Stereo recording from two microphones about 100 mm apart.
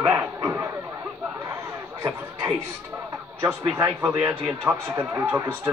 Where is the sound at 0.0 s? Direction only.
15° right (ahead or behind).